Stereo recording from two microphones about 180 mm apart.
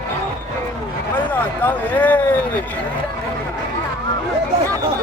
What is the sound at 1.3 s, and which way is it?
Speech, 10° left (ahead or behind).